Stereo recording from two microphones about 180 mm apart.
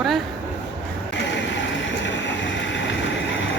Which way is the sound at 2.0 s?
90° left.